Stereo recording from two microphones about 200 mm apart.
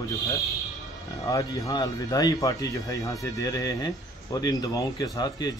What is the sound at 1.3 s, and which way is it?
Speech, 15° left (ahead or behind).